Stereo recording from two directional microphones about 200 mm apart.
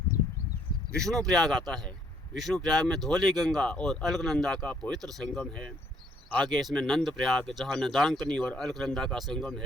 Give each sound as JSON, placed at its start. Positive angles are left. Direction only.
{"t": 0.9, "sound": "speech", "side_deg": 0}